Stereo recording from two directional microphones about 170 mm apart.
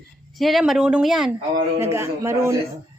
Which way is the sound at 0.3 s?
Centre (ahead or behind).